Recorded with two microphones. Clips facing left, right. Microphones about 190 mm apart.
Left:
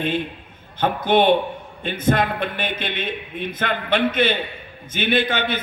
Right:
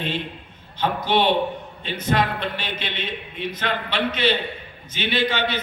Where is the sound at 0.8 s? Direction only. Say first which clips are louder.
Left 3 dB; 50° left (ahead or behind).